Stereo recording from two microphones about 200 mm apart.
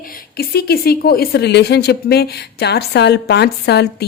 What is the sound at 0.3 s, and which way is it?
A woman's voice, 50° left (ahead or behind).